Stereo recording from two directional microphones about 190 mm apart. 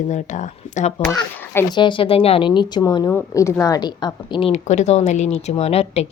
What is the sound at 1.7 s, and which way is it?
Speech, 25° left (ahead or behind).